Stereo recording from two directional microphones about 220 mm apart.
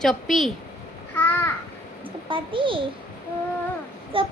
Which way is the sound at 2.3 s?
25° right (ahead or behind).